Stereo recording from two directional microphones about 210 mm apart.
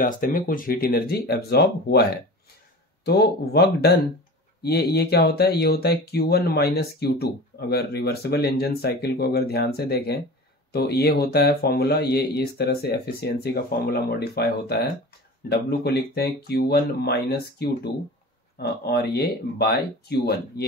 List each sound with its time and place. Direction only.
0.0 s speech: 40° left (ahead or behind)
3.1 s speech: 50° left (ahead or behind)